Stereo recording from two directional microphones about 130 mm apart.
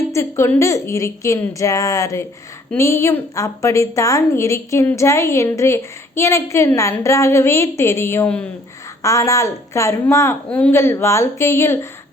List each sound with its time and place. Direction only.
0.1 s a woman's voice: 20° left (ahead or behind)